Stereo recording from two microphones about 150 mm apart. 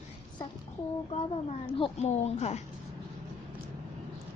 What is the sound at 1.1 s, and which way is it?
A child's voice, 40° left (ahead or behind).